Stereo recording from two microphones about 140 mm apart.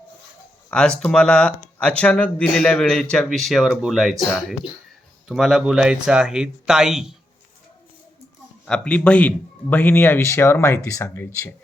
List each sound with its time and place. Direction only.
0.7 s speech: 5° left (ahead or behind)
8.6 s a man's voice: 5° left (ahead or behind)